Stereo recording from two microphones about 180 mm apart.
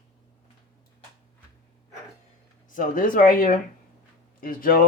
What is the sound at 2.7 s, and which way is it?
Speech, 50° left (ahead or behind).